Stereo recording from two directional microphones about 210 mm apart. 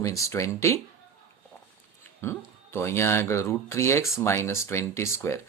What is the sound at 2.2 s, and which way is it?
Speech, 10° left (ahead or behind).